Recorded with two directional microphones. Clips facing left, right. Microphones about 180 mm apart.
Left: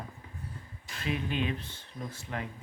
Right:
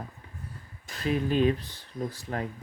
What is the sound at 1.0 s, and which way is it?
Speech, 40° right (ahead or behind).